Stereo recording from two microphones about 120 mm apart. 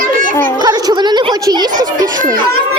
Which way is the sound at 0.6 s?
35° right (ahead or behind).